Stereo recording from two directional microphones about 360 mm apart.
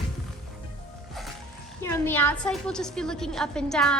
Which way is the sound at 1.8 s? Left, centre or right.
Centre.